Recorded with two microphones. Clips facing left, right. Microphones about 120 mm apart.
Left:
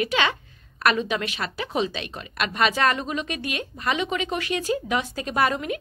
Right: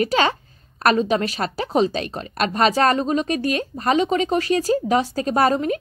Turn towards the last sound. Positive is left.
turn(degrees=-35)  # may be behind; listen again after turning